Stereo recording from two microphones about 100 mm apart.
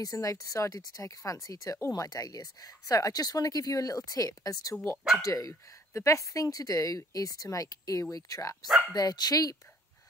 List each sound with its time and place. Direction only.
0.0 s speech: 35° left (ahead or behind)